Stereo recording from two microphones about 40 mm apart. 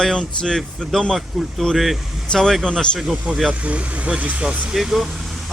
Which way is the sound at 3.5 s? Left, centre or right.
Right.